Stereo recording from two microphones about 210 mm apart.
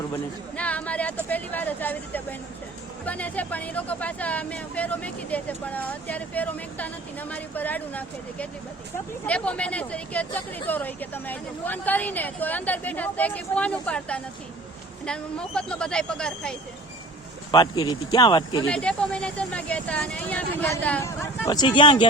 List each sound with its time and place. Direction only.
0.5 s speech: 5° left (ahead or behind)
17.5 s speech: 20° left (ahead or behind)
18.7 s speech: 5° left (ahead or behind); by 22.0 s 25° left (ahead or behind)